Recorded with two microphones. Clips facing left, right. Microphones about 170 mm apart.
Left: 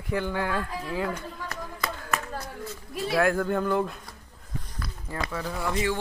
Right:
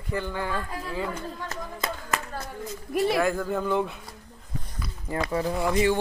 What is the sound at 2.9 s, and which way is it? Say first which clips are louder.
Speech: right 6 dB; 65° right (ahead or behind).